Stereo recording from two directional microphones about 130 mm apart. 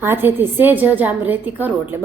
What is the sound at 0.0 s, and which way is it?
A woman's voice, 15° right (ahead or behind).